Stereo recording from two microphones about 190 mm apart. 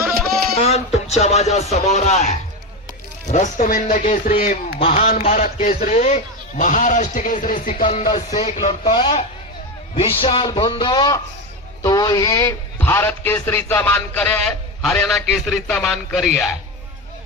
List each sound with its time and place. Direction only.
0.5 s a man's voice: 35° left (ahead or behind); by 16.5 s centre (ahead or behind)